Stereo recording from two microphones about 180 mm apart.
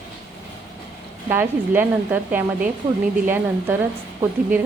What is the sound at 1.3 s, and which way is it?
Speech, 10° right (ahead or behind).